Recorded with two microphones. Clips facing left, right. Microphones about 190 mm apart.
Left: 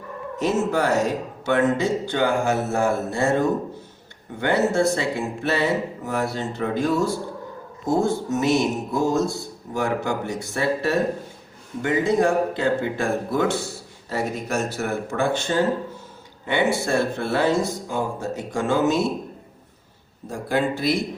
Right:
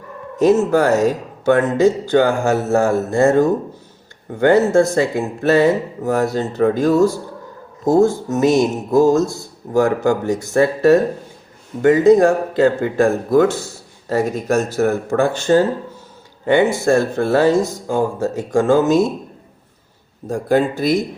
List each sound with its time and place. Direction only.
0.3 s speech: 45° right (ahead or behind)
4.4 s speech: 45° right (ahead or behind)
20.2 s speech: 45° right (ahead or behind)